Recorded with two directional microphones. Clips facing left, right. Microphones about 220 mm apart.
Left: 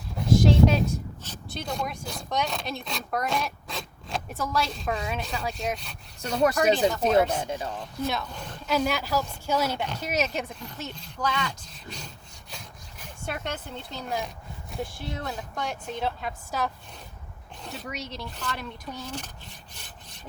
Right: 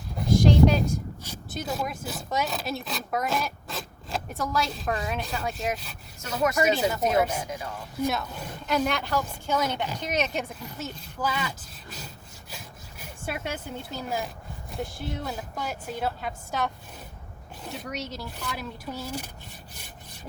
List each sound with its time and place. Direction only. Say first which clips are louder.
0.2 s a sound: even; centre (ahead or behind)
1.2 s speech: right 2 dB; 5° right (ahead or behind)
7.4 s speech: left 3 dB; 30° left (ahead or behind)
8.0 s a woman's voice: right 3 dB; centre (ahead or behind)
17.8 s rub: right 1 dB; centre (ahead or behind)